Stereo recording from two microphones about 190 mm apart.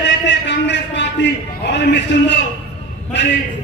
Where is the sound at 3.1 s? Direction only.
65° left (ahead or behind).